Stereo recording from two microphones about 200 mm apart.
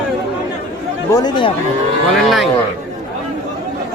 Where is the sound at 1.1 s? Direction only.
20° left (ahead or behind).